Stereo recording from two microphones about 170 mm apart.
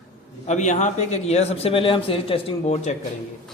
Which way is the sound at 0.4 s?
45° left (ahead or behind).